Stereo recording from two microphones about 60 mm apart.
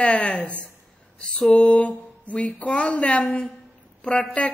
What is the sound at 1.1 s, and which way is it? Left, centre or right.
Speech, centre.